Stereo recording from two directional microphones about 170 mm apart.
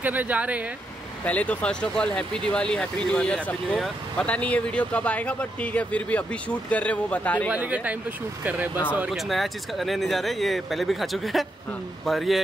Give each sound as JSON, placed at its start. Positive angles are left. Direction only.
{"t": 0.0, "sound": "speech", "side_deg": -10}
{"t": 1.2, "sound": "speech", "side_deg": 10}
{"t": 7.4, "sound": "speech", "side_deg": -10}